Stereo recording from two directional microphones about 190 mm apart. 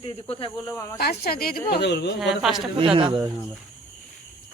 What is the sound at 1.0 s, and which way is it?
A woman's voice, 55° left (ahead or behind).